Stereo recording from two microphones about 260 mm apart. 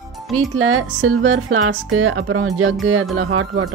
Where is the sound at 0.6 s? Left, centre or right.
Right.